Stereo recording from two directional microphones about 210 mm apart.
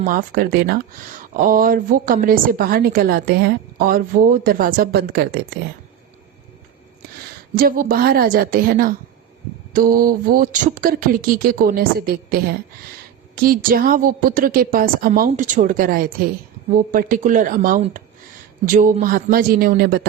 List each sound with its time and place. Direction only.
0.0 s speech: 40° right (ahead or behind)
7.5 s speech: 45° right (ahead or behind)